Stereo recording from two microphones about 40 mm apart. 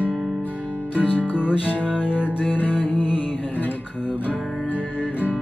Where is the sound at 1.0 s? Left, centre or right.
Left.